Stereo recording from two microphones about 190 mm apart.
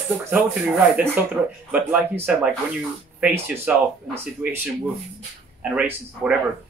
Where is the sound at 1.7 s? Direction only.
10° right (ahead or behind).